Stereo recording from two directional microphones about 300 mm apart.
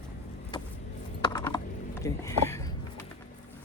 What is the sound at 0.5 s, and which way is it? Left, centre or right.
Vehicle, centre.